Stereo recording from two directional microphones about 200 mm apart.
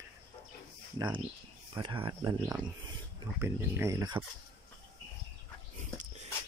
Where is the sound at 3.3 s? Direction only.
10° right (ahead or behind).